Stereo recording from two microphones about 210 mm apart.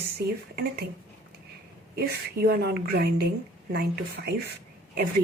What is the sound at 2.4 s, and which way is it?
A woman's voice, 50° right (ahead or behind).